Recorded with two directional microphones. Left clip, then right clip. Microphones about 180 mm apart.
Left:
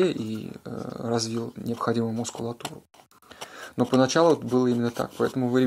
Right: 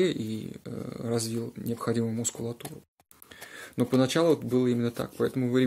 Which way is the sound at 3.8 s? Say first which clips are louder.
Left 4 dB; 10° right (ahead or behind).